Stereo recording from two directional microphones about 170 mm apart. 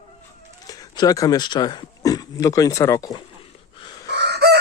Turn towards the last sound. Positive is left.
turn(degrees=-75)  # may be behind; listen again after turning